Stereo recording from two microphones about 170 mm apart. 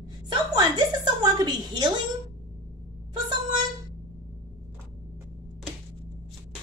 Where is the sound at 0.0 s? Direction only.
25° right (ahead or behind).